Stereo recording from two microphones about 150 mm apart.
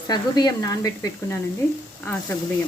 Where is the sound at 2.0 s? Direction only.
10° left (ahead or behind).